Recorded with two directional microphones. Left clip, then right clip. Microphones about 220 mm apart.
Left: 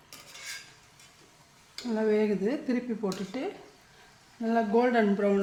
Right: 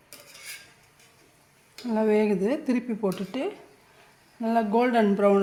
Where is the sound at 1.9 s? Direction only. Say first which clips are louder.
Right 4 dB; 30° right (ahead or behind).